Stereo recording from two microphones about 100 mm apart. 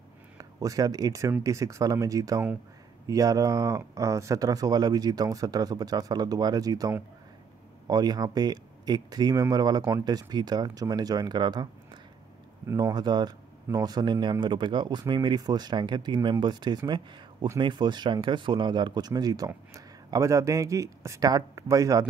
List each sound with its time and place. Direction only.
0.4 s speech: 35° right (ahead or behind)
12.6 s speech: 30° right (ahead or behind)
12.9 s speech: 45° right (ahead or behind)